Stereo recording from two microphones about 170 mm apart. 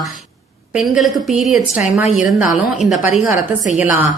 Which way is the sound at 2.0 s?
45° left (ahead or behind).